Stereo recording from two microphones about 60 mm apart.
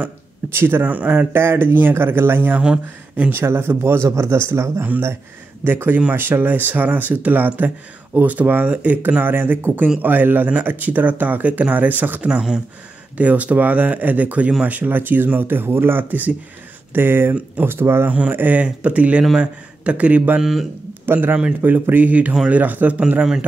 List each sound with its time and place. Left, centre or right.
0.0 s speech: right
0.8 s speech: right
1.3 s speech: right
2.6 s speech: centre
3.3 s speech: right
5.6 s speech: right
12.3 s speech: centre; by 18.1 s right
18.3 s speech: right
21.0 s speech: right